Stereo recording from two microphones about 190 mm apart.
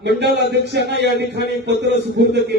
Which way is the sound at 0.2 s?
65° right (ahead or behind).